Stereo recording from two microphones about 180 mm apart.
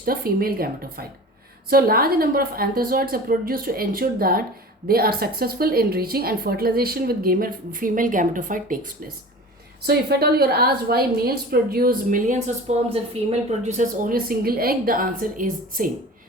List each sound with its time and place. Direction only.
0.0 s a woman's voice: 55° right (ahead or behind)
9.8 s a woman's voice: 65° right (ahead or behind)